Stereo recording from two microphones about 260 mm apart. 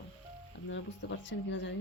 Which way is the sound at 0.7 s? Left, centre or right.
Left.